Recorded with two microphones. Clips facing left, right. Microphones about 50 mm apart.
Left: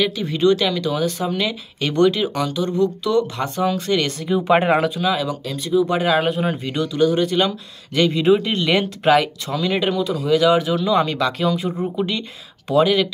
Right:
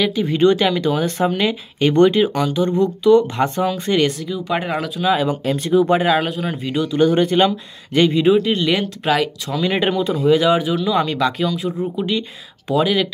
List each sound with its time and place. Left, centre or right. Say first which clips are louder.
0.2 s speech: right 4 dB; right
4.3 s speech: left 6 dB; left
5.0 s speech: right 3 dB; right
5.3 s speech: right 4 dB; right
6.0 s speech: even; centre
6.6 s speech: right 2 dB; centre
6.9 s speech: right 2 dB; right
8.3 s speech: right 1 dB; centre
9.6 s speech: right 2 dB; right
10.6 s speech: even; centre
11.4 s speech: even; centre